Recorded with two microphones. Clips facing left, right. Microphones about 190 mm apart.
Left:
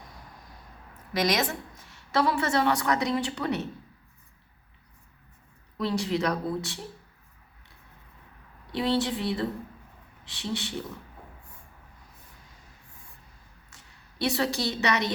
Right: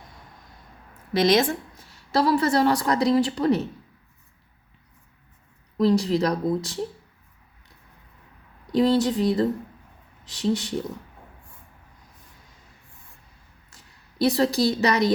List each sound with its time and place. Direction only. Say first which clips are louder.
1.1 s a woman's voice: right 7 dB; 30° right (ahead or behind)
5.8 s a woman's voice: right 7 dB; 35° right (ahead or behind)
8.7 s a woman's voice: right 7 dB; 40° right (ahead or behind)
14.2 s a woman's voice: right 7 dB; 35° right (ahead or behind)